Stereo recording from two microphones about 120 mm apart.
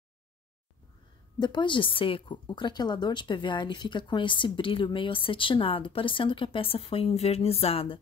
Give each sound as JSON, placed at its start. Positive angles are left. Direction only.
{"t": 1.4, "sound": "a woman's voice", "side_deg": 40}